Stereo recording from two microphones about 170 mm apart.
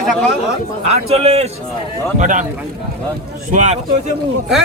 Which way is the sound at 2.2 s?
50° right (ahead or behind).